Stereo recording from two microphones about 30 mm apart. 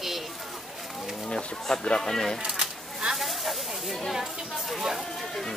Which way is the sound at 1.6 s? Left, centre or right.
Left.